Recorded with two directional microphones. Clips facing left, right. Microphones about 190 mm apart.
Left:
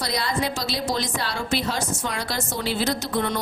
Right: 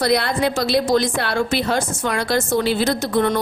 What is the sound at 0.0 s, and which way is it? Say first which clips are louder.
A woman's voice: right 7 dB; 60° right (ahead or behind).